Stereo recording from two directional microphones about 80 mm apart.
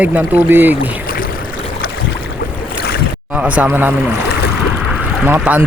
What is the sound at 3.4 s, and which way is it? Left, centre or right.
Speech, centre.